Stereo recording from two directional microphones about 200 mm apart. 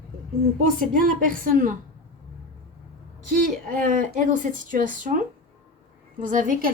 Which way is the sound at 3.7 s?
45° right (ahead or behind).